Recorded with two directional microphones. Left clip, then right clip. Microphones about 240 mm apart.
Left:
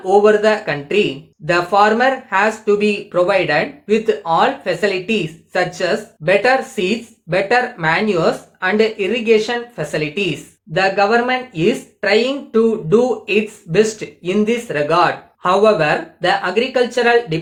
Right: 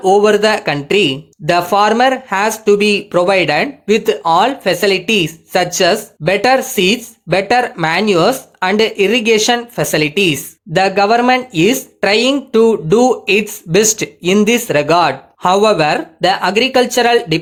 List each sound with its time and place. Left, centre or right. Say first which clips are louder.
0.0 s speech: right 2 dB; right